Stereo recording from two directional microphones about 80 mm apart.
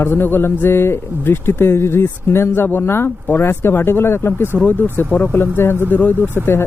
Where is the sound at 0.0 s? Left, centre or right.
Left.